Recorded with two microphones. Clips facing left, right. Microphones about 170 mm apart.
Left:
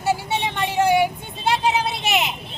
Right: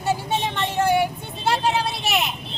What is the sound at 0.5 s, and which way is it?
Vehicle, 10° left (ahead or behind).